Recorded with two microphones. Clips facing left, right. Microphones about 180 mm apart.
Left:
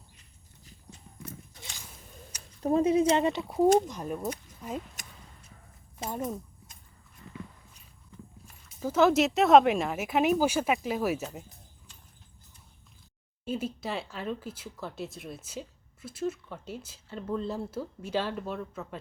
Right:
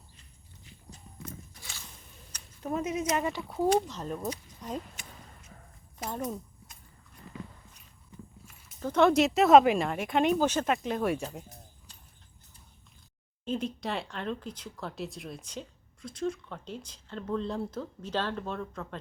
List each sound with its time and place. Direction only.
2.6 s speech: 30° left (ahead or behind); by 4.8 s 5° left (ahead or behind)
6.0 s speech: 25° left (ahead or behind)
8.8 s speech: 5° left (ahead or behind)
13.4 s speech: 5° left (ahead or behind)